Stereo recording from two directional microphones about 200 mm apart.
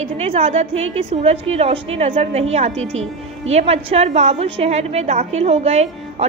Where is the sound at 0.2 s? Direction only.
30° right (ahead or behind).